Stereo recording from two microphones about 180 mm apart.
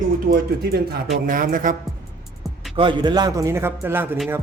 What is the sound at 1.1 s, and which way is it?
Speech, 50° right (ahead or behind).